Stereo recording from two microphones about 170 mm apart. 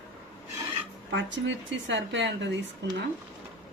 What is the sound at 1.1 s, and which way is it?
Speech, 90° right.